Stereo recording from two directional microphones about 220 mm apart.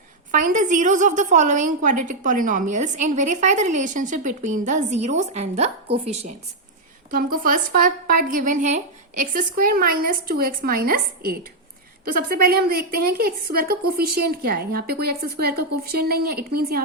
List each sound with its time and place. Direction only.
0.3 s a woman's voice: 35° right (ahead or behind)
7.1 s a woman's voice: 40° right (ahead or behind)